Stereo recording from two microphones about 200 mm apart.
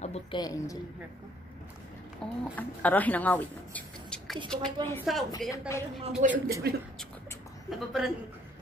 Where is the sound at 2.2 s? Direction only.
Centre (ahead or behind).